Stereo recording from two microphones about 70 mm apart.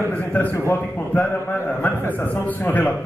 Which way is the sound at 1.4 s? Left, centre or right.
Left.